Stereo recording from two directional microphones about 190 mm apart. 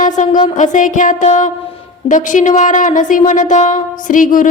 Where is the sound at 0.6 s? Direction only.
40° left (ahead or behind).